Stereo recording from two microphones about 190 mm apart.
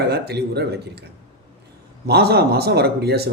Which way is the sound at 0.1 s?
60° right (ahead or behind).